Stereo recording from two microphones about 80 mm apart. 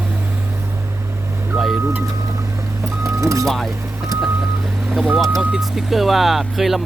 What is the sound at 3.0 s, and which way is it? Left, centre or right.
Vehicle, right.